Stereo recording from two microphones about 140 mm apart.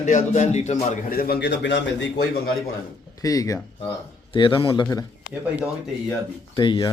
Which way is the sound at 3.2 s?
25° left (ahead or behind).